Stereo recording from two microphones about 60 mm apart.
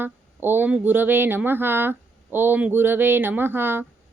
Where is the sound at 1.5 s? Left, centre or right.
Right.